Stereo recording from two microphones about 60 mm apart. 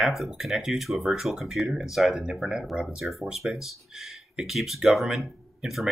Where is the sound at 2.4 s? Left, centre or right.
Centre.